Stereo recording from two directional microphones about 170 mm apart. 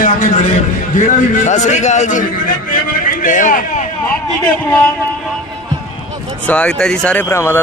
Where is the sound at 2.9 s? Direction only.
50° left (ahead or behind).